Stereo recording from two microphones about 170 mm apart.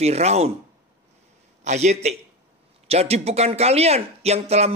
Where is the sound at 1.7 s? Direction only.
40° right (ahead or behind).